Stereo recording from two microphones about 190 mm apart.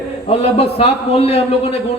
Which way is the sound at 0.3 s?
35° left (ahead or behind).